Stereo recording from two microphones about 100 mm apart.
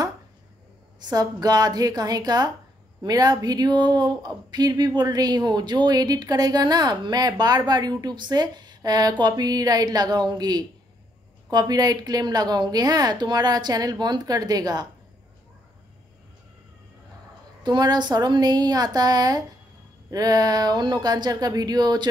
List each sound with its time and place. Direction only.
1.0 s a woman's voice: 40° right (ahead or behind)
17.6 s a woman's voice: 45° right (ahead or behind)